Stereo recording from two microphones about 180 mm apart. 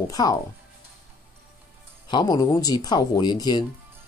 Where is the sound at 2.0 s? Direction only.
25° left (ahead or behind).